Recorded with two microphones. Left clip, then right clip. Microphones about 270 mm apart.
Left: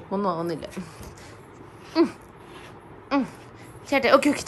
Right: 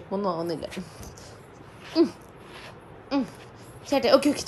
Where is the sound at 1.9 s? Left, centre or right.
Centre.